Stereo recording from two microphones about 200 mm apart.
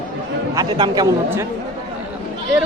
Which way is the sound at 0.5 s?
20° right (ahead or behind).